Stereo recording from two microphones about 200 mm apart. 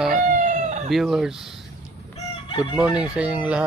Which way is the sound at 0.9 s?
Centre (ahead or behind).